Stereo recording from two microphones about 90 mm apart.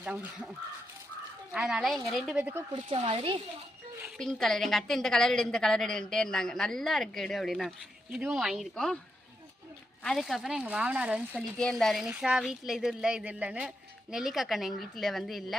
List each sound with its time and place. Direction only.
0.0 s speech: 15° right (ahead or behind)
1.5 s a woman's voice: 5° right (ahead or behind)
2.4 s speech: 20° right (ahead or behind)
2.7 s speech: 65° right (ahead or behind)
4.2 s a woman's voice: 5° left (ahead or behind)
8.7 s a woman's voice: 10° left (ahead or behind)
10.0 s a woman's voice: 5° left (ahead or behind)
10.6 s speech: 15° right (ahead or behind)
11.5 s a woman's voice: 10° left (ahead or behind)
12.0 s a woman's voice: 10° right (ahead or behind)